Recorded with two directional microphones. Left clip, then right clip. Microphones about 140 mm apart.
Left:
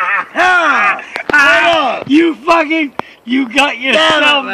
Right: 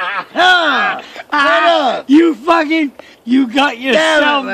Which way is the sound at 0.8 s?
35° right (ahead or behind).